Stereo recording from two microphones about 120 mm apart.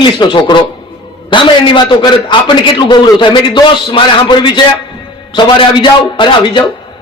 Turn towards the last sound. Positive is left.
turn(degrees=40)  # may be behind; listen again after turning